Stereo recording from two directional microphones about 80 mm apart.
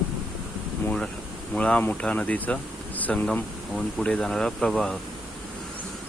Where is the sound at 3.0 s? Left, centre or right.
Centre.